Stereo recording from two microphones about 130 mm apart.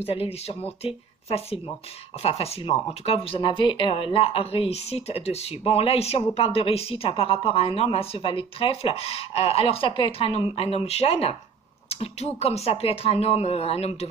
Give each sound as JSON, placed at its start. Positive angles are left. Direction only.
{"t": 0.0, "sound": "speech", "side_deg": 50}